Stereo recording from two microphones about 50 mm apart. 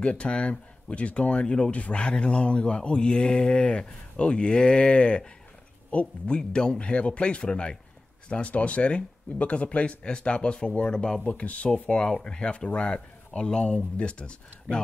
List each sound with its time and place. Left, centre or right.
0.0 s speech: left
11.2 s speech: left